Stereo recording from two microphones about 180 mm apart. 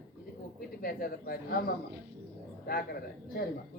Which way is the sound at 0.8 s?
55° left (ahead or behind).